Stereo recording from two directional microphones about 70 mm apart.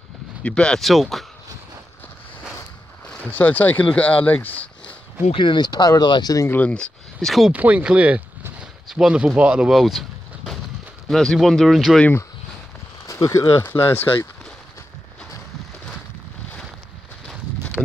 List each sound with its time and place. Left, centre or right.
0.4 s speech: centre
0.7 s speech: centre
3.3 s speech: left
5.6 s speech: left
5.9 s speech: left
6.5 s speech: centre
7.5 s speech: right
9.8 s a sound: centre
11.1 s speech: centre
13.0 s speech: left
13.7 s speech: left
17.8 s a sound: centre